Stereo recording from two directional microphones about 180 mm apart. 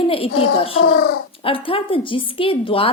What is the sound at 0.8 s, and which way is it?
Speech, 55° left (ahead or behind).